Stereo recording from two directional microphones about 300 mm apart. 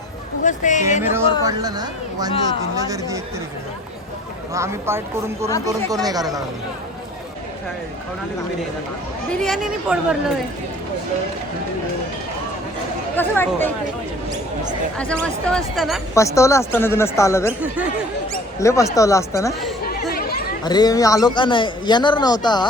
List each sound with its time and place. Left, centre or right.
0.4 s speech: left
1.1 s a man's voice: centre
4.5 s a man's voice: centre
9.3 s speech: centre
13.1 s a man's voice: centre
14.9 s speech: centre
16.1 s a man's voice: centre
18.6 s a man's voice: centre
19.9 s chatter: left
20.7 s a man's voice: centre